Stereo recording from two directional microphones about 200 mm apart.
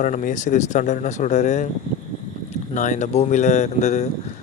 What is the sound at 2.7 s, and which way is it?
Speech, 40° left (ahead or behind).